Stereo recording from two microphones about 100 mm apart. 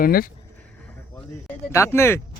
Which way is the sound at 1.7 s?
25° left (ahead or behind).